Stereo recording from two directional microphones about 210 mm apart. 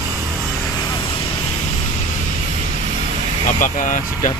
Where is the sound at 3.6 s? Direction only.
40° left (ahead or behind).